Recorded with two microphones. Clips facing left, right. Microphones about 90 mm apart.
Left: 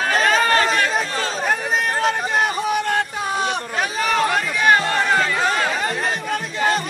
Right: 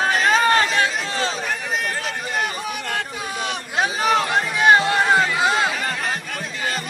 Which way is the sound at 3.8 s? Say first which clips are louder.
Right 2 dB; 25° right (ahead or behind).